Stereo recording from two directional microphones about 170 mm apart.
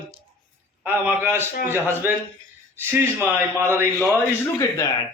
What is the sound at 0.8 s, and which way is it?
Speech, 10° right (ahead or behind).